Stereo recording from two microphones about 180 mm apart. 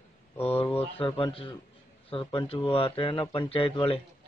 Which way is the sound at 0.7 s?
30° left (ahead or behind).